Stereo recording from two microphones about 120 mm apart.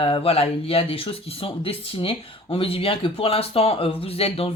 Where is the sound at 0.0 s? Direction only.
55° left (ahead or behind).